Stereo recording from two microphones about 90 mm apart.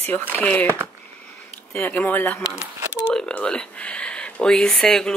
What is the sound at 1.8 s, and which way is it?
Speech, 20° left (ahead or behind).